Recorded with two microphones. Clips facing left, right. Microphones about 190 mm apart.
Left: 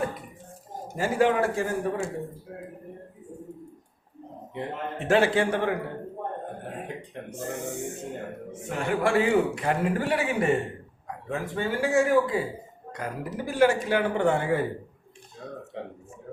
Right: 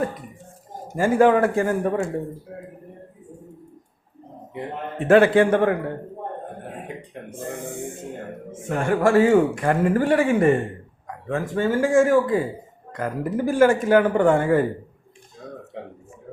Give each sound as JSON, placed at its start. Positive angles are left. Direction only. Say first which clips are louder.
{"t": 0.9, "sound": "a man's voice", "louder": "right 6 dB", "side_deg": -50}
{"t": 5.0, "sound": "a man's voice", "louder": "right 7 dB", "side_deg": -55}
{"t": 8.5, "sound": "a man's voice", "louder": "right 6 dB", "side_deg": -45}